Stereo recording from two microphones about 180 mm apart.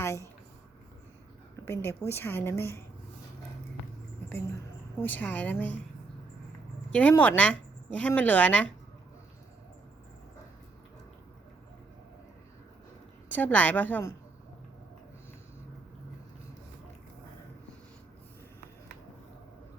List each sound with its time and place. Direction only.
0.0 s speech: 15° left (ahead or behind)
1.6 s a woman's voice: 15° left (ahead or behind)
4.9 s a woman's voice: 10° left (ahead or behind)
6.9 s a woman's voice: 10° left (ahead or behind)
13.3 s a woman's voice: 10° left (ahead or behind)